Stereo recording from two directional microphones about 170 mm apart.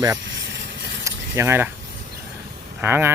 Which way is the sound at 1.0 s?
15° right (ahead or behind).